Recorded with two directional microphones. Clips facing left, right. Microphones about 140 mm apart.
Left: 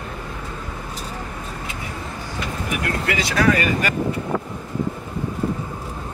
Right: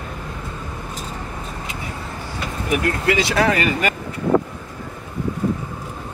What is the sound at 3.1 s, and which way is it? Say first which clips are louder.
Speech: right 1 dB; 25° right (ahead or behind).